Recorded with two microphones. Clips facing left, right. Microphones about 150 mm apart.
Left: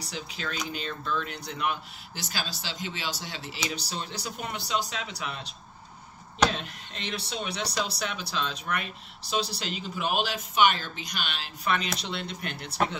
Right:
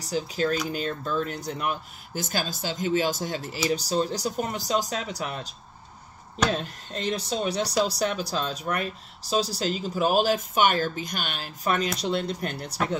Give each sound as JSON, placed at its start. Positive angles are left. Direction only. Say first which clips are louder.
{"t": 0.0, "sound": "speech", "louder": "right 10 dB", "side_deg": -40}